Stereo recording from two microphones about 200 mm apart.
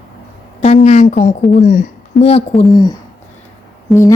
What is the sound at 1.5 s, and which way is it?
Speech, 40° left (ahead or behind).